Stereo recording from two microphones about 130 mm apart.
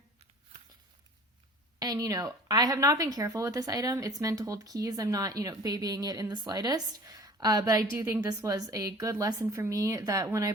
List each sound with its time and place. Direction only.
1.8 s speech: 30° right (ahead or behind)